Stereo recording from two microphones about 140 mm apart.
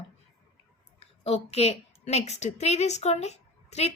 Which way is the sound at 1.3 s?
45° left (ahead or behind).